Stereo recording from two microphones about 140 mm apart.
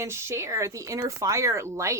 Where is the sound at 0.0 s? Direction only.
20° right (ahead or behind).